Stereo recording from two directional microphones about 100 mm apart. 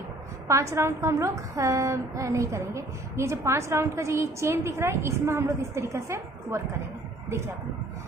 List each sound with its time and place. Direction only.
0.5 s a woman's voice: 30° right (ahead or behind)